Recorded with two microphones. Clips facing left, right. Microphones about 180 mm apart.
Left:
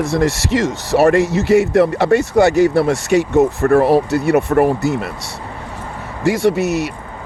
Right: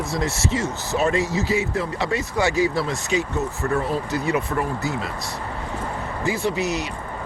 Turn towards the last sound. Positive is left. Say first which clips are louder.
# left 8 dB
turn(degrees=65)  # may be behind; listen again after turning